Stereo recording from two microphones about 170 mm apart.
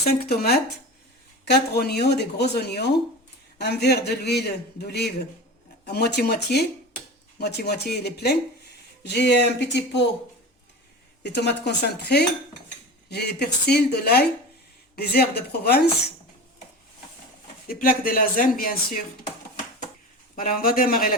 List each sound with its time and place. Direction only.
0.0 s a man's voice: 65° left (ahead or behind)
9.0 s speech: 90° left
11.2 s a man's voice: 80° left
17.7 s speech: 55° left (ahead or behind)
20.3 s speech: 55° left (ahead or behind)